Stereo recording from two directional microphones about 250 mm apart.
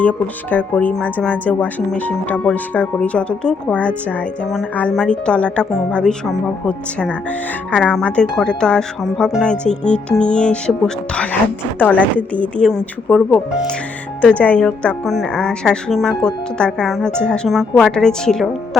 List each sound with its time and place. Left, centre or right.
0.0 s a woman's voice: centre